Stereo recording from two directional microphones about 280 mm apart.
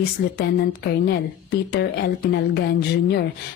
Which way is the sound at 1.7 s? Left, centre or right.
Left.